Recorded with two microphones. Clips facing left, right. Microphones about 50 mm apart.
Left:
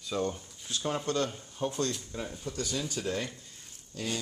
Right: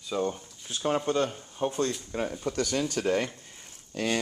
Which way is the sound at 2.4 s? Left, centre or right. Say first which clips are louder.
Right 5 dB; right.